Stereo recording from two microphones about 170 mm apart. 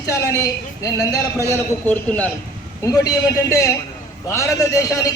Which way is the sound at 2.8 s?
20° left (ahead or behind).